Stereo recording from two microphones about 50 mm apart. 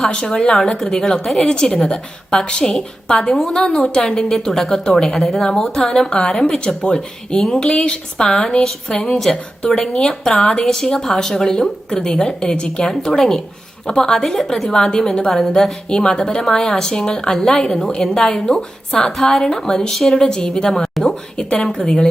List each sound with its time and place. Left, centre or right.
0.1 s a woman's voice: centre